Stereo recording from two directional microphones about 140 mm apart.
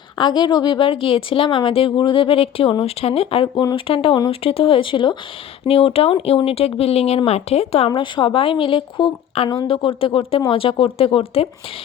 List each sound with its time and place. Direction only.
0.2 s a woman's voice: 30° left (ahead or behind)
7.9 s a woman's voice: 35° left (ahead or behind)